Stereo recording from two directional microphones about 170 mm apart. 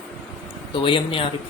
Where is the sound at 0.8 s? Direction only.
30° left (ahead or behind).